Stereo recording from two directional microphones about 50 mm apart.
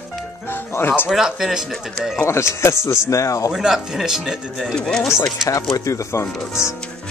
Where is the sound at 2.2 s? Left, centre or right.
Left.